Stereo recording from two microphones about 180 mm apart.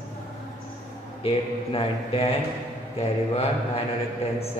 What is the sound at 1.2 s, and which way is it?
A man's voice, 30° left (ahead or behind).